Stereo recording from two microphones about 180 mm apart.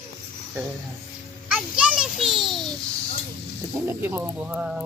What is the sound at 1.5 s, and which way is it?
Children playing, 5° right (ahead or behind).